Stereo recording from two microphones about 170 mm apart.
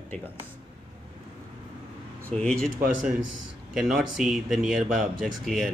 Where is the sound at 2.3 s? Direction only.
5° left (ahead or behind).